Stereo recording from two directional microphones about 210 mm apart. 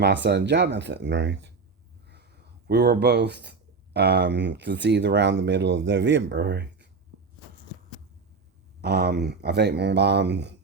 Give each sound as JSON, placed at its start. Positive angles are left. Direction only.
{"t": 0.0, "sound": "speech", "side_deg": -55}
{"t": 2.0, "sound": "a sound", "side_deg": -50}
{"t": 3.9, "sound": "speech", "side_deg": -55}
{"t": 8.8, "sound": "speech", "side_deg": -50}